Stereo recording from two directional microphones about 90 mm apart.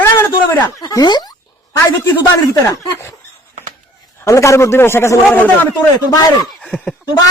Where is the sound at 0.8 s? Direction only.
50° left (ahead or behind).